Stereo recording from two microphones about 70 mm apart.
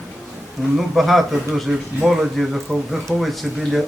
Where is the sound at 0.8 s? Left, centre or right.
Centre.